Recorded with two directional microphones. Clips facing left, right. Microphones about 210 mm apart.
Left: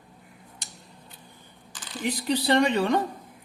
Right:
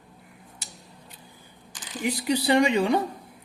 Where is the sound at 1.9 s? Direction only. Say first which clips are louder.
Right 1 dB; 10° right (ahead or behind).